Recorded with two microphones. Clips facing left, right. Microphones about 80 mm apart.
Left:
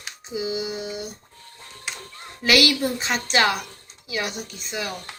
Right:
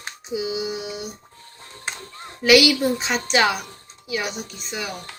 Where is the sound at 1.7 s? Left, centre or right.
Right.